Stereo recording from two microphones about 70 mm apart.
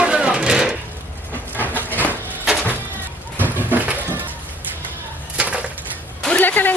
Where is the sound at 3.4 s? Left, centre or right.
Right.